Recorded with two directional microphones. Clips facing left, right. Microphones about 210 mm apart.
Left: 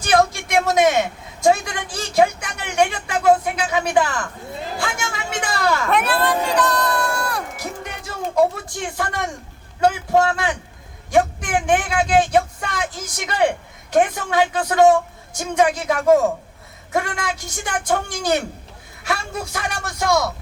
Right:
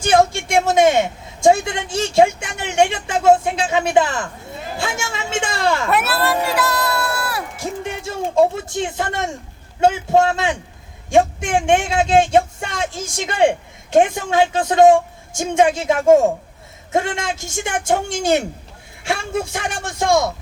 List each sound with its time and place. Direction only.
0.0 s speech: 25° right (ahead or behind)
5.9 s speech: 5° right (ahead or behind)
7.5 s a sound: 25° right (ahead or behind)
9.8 s speech: 25° right (ahead or behind)